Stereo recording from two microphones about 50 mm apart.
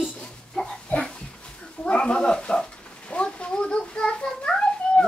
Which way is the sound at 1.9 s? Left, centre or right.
Left.